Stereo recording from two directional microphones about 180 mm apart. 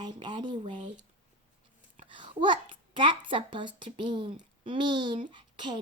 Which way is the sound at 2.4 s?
25° right (ahead or behind).